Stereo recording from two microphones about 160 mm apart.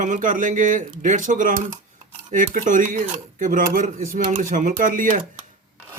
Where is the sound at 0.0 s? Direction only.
55° right (ahead or behind).